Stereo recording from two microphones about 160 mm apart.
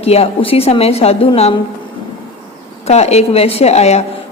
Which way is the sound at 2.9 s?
40° left (ahead or behind).